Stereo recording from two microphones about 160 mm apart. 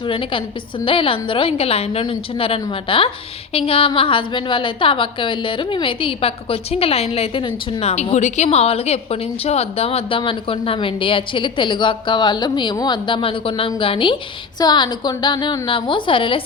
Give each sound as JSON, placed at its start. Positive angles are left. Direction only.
{"t": 0.0, "sound": "a woman's voice", "side_deg": 35}